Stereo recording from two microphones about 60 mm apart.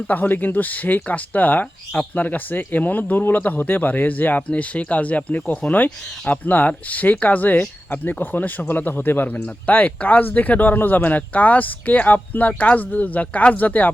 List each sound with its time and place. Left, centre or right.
0.1 s speech: left